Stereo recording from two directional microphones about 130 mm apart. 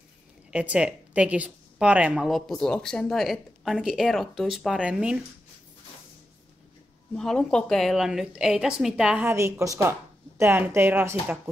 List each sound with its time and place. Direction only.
0.5 s a woman's voice: 10° right (ahead or behind)
2.2 s speech: centre (ahead or behind)
7.2 s speech: 5° left (ahead or behind)
9.2 s a woman's voice: 20° right (ahead or behind)